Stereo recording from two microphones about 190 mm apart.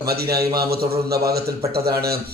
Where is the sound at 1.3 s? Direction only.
55° right (ahead or behind).